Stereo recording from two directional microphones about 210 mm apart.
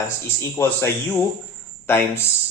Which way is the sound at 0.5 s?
10° left (ahead or behind).